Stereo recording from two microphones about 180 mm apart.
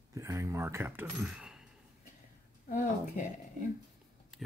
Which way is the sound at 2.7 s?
45° left (ahead or behind).